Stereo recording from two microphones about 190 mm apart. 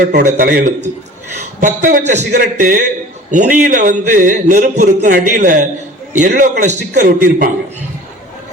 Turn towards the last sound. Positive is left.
turn(degrees=-45)  # may be behind; listen again after turning